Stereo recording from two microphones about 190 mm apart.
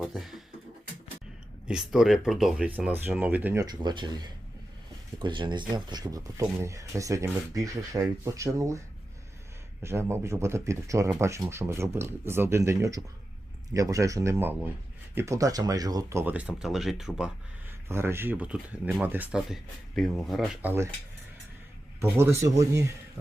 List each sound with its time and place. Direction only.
0.0 s speech: centre (ahead or behind)
1.6 s speech: 5° right (ahead or behind)
9.8 s speech: 15° right (ahead or behind)
17.8 s speech: 15° right (ahead or behind)
22.0 s speech: 15° right (ahead or behind)